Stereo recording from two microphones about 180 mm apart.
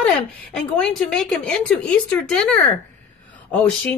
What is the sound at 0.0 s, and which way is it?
A woman's voice, 5° left (ahead or behind).